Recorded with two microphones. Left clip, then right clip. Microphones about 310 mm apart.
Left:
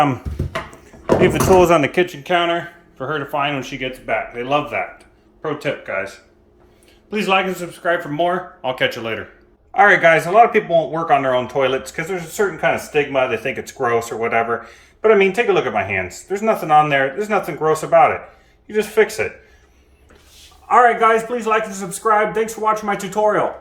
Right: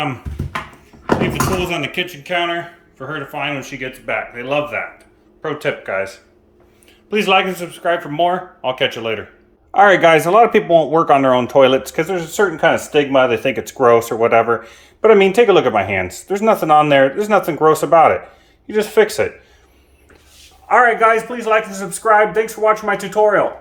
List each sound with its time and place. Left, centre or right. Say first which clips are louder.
1.2 s speech: left 6 dB; centre
7.1 s speech: right 3 dB; centre
20.7 s speech: right 1 dB; centre